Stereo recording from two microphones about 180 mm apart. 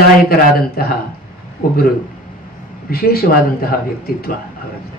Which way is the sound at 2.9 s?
55° left (ahead or behind).